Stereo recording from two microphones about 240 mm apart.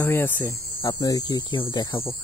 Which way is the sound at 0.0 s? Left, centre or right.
Centre.